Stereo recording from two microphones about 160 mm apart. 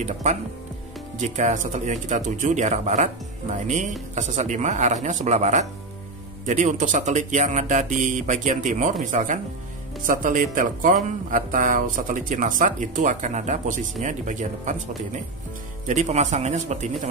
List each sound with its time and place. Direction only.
0.0 s speech: 45° right (ahead or behind)
15.9 s speech: 45° right (ahead or behind)